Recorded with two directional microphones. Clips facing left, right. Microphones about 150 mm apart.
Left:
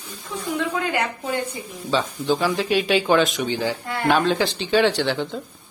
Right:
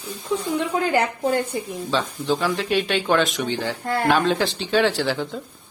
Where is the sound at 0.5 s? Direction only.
35° right (ahead or behind).